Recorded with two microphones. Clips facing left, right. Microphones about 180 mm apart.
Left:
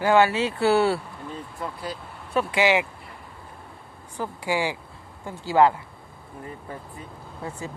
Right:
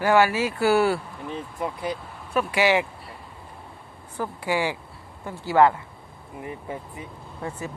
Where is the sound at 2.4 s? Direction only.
20° left (ahead or behind).